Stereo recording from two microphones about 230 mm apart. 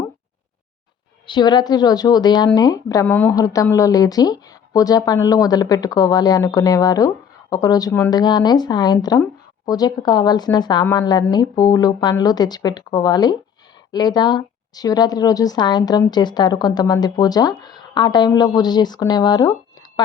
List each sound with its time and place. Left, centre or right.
1.3 s a woman's voice: centre